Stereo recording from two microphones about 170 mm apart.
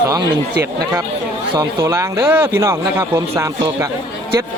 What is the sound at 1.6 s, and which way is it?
A man's voice, 15° right (ahead or behind).